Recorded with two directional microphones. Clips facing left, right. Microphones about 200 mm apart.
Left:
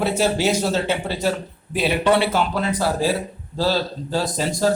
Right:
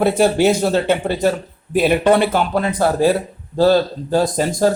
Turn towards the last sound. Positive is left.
turn(degrees=-50)  # may be behind; listen again after turning